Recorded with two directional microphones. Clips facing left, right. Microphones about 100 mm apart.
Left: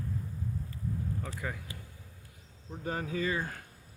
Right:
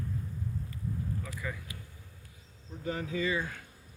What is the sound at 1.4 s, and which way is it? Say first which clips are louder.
Speech: left 1 dB; 55° left (ahead or behind).